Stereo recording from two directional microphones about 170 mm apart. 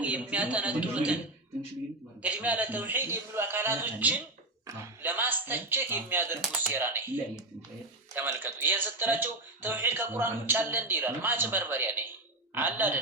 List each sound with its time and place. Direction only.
0.0 s speech: 10° right (ahead or behind)
2.2 s speech: 10° right (ahead or behind)